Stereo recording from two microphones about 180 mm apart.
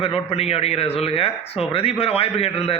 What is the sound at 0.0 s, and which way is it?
A man's voice, 35° left (ahead or behind).